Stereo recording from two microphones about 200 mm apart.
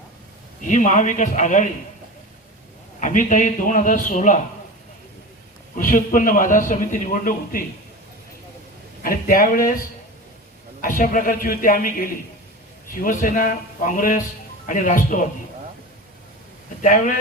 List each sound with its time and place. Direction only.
0.6 s a man's voice: 40° left (ahead or behind)
3.0 s a man's voice: 40° left (ahead or behind)
5.7 s a man's voice: 40° left (ahead or behind)
9.0 s a man's voice: 45° left (ahead or behind)
10.8 s a man's voice: 45° left (ahead or behind)
16.8 s a man's voice: 40° left (ahead or behind)